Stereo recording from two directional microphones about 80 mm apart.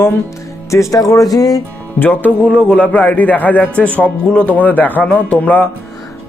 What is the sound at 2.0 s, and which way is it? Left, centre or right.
A man's voice, left.